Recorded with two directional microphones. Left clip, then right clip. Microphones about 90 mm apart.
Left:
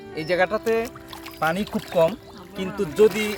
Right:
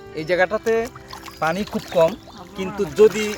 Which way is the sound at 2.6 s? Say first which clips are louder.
Right 3 dB; 10° left (ahead or behind).